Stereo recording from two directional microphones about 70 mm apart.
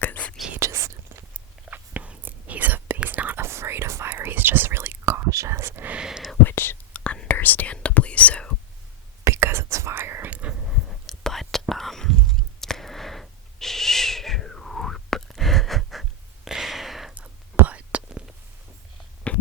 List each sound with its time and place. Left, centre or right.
0.0 s whispering: left
0.6 s whispering: right
1.7 s whispering: right
3.4 s whispering: right
6.0 s whispering: centre
6.4 s whispering: left
6.9 s whispering: centre
9.2 s whispering: right
10.3 s a sound: centre
10.7 s whispering: centre
17.7 s whispering: centre
19.3 s heart sounds: centre